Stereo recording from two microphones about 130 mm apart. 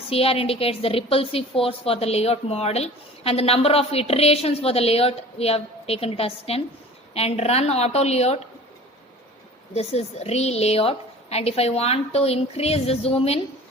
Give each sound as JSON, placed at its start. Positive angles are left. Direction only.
{"t": 0.1, "sound": "a woman's voice", "side_deg": 45}
{"t": 9.7, "sound": "a woman's voice", "side_deg": 55}